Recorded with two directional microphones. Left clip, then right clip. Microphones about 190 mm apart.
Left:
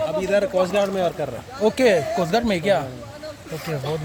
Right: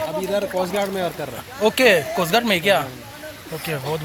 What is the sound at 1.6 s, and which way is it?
Speech, 10° left (ahead or behind).